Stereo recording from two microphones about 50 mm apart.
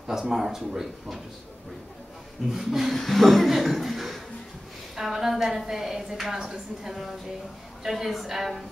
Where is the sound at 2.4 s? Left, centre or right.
Centre.